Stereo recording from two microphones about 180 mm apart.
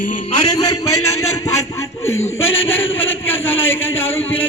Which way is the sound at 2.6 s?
90° left.